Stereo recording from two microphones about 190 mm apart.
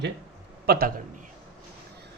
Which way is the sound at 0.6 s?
55° right (ahead or behind).